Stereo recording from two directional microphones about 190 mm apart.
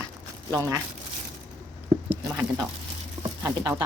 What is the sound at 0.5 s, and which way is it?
Speech, 20° right (ahead or behind).